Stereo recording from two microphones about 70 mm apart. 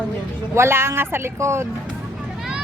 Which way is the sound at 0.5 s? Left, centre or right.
Right.